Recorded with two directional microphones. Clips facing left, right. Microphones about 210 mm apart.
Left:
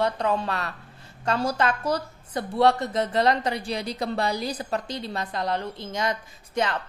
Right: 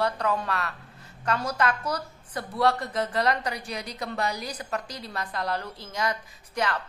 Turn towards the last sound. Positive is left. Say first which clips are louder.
# left 3 dB
turn(degrees=25)  # may be behind; listen again after turning